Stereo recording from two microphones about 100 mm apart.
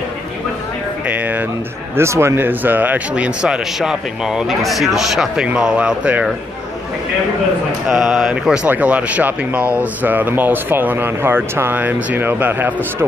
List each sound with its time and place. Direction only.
1.0 s a man's voice: 15° right (ahead or behind)
7.9 s a man's voice: 5° right (ahead or behind)